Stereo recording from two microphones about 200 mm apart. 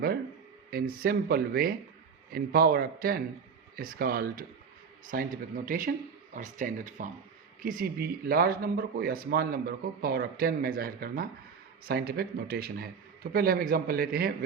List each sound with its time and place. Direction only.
0.7 s speech: 50° right (ahead or behind)